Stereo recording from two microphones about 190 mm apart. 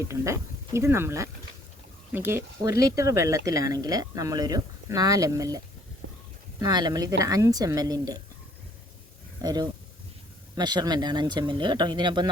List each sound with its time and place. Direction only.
0.0 s speech: 15° right (ahead or behind)
6.0 s a sound: 90° right
6.6 s speech: 20° right (ahead or behind)
9.4 s speech: 20° right (ahead or behind)